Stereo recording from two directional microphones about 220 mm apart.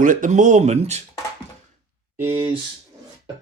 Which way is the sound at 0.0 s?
35° right (ahead or behind).